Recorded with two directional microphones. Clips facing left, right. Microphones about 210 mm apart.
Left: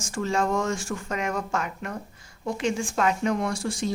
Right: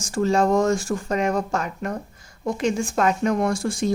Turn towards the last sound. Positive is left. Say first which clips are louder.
# right 5 dB
turn(degrees=-50)  # may be behind; listen again after turning